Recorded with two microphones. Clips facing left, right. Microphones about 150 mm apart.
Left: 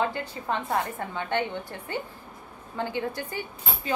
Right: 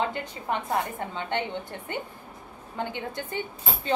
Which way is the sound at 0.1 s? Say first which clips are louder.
Even; 20° right (ahead or behind).